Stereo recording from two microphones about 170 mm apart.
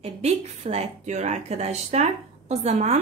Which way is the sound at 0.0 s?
35° right (ahead or behind).